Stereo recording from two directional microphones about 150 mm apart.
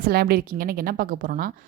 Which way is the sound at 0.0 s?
90° right.